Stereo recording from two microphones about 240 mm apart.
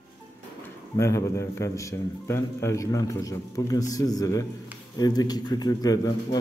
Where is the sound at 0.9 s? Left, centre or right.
Centre.